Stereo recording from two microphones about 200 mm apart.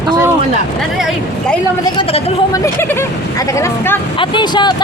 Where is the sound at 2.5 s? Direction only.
10° left (ahead or behind).